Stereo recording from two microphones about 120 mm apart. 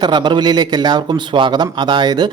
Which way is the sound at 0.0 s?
40° right (ahead or behind).